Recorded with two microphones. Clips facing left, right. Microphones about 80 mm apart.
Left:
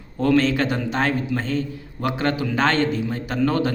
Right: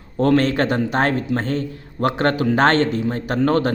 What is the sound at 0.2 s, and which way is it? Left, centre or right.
A man's voice, right.